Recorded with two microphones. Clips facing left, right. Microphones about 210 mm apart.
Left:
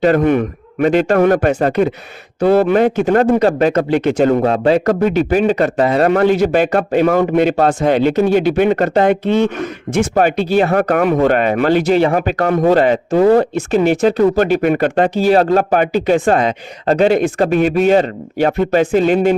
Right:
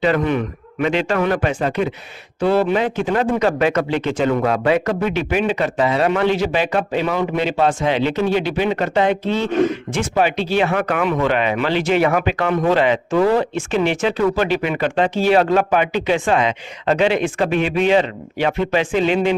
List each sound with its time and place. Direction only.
0.0 s speech: 50° left (ahead or behind)
3.3 s a man's voice: 35° left (ahead or behind)
3.9 s speech: 45° left (ahead or behind)